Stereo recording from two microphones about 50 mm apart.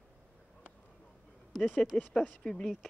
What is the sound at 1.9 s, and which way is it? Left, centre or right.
Speech, centre.